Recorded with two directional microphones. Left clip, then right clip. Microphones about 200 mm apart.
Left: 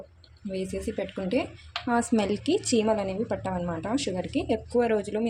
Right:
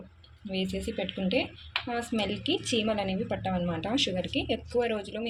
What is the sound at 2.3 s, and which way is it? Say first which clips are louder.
Speech: left 4 dB; 25° left (ahead or behind).